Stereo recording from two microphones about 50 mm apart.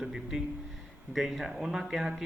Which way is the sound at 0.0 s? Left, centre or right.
Centre.